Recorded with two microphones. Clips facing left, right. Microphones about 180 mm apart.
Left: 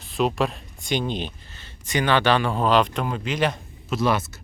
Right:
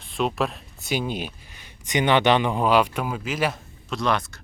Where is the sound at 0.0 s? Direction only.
Centre (ahead or behind).